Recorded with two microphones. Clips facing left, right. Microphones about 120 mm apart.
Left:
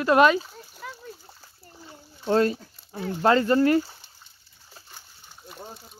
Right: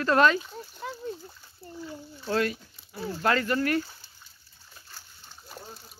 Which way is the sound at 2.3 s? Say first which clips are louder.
Left 6 dB; 20° left (ahead or behind).